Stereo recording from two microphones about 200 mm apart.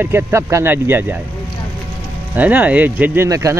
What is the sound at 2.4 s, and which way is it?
Speech, 10° right (ahead or behind).